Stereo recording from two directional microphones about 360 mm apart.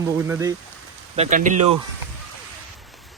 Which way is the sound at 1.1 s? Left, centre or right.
Centre.